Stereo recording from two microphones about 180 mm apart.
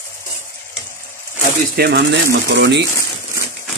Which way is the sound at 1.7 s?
65° right (ahead or behind).